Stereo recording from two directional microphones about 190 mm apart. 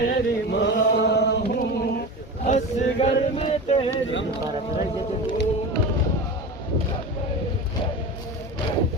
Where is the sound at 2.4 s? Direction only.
40° left (ahead or behind).